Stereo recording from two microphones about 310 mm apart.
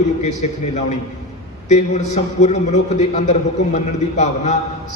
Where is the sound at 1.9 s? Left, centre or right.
Left.